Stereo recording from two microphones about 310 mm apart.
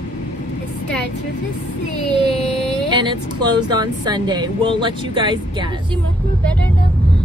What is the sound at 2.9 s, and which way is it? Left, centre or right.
Speech, centre.